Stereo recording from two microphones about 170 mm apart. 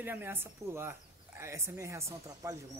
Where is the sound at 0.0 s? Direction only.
10° right (ahead or behind).